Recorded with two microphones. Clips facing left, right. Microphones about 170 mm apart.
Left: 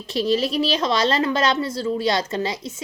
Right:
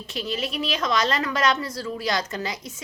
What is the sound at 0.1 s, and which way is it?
A woman's voice, 35° left (ahead or behind).